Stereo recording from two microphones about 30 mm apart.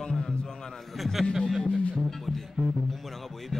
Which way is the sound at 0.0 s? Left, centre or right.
Left.